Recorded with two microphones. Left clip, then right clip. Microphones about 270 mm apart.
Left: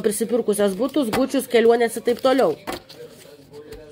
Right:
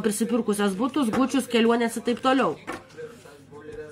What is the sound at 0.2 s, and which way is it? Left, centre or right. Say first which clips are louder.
Speech: left 5 dB; centre.